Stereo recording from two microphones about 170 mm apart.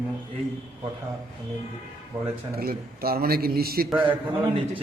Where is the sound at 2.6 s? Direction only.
60° right (ahead or behind).